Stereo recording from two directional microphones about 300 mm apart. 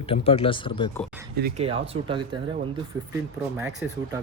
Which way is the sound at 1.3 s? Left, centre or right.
Right.